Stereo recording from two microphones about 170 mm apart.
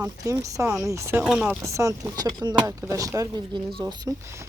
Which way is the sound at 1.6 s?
20° right (ahead or behind).